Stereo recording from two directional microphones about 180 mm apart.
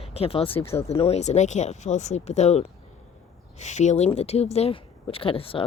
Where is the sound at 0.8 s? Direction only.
35° left (ahead or behind).